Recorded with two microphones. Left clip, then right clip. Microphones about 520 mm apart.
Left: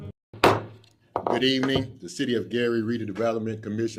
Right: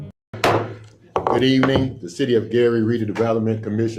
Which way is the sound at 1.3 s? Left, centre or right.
Left.